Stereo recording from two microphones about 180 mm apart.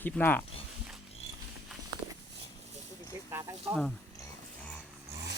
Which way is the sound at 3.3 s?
15° right (ahead or behind).